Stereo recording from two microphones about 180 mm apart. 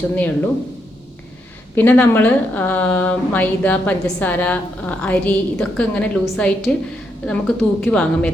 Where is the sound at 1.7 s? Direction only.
10° left (ahead or behind).